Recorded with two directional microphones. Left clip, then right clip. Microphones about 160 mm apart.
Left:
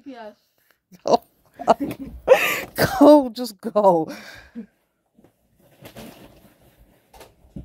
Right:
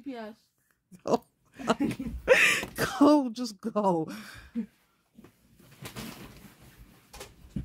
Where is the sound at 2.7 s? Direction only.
40° left (ahead or behind).